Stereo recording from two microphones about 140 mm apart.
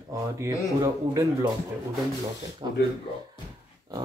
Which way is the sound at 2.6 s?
35° right (ahead or behind).